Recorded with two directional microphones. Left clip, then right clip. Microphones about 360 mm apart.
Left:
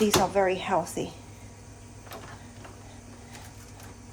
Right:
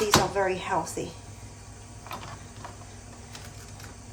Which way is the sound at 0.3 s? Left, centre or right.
Left.